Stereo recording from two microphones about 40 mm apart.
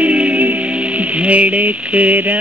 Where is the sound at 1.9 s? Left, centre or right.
Right.